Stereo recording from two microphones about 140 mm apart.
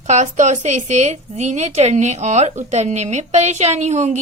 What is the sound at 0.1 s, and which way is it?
A woman's voice, 55° right (ahead or behind).